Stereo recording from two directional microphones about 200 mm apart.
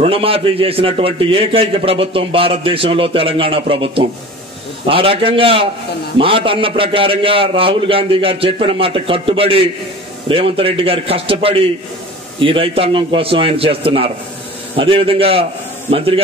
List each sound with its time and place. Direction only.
0.0 s a man's voice: 30° right (ahead or behind)